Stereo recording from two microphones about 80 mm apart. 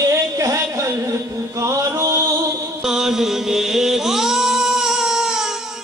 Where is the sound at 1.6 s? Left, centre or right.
Right.